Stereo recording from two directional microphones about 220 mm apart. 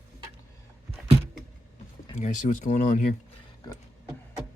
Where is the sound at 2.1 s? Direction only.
35° left (ahead or behind).